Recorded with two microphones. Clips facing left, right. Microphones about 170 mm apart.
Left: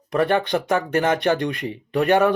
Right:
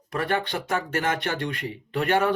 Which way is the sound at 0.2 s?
20° left (ahead or behind).